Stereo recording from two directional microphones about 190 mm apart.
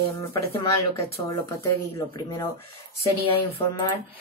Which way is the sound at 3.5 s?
25° left (ahead or behind).